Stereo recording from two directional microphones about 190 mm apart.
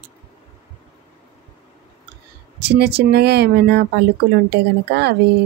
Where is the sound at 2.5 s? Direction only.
60° right (ahead or behind).